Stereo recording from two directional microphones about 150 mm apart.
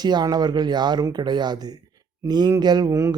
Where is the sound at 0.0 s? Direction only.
30° right (ahead or behind).